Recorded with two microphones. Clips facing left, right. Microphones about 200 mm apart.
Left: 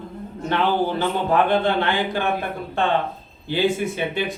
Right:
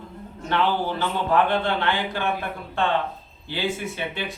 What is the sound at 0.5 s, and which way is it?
A man's voice, 15° left (ahead or behind).